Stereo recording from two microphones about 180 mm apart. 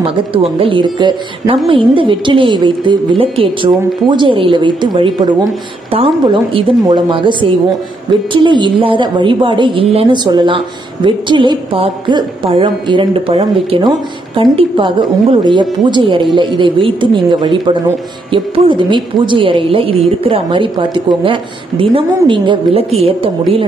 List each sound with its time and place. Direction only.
0.0 s a woman's voice: 30° right (ahead or behind)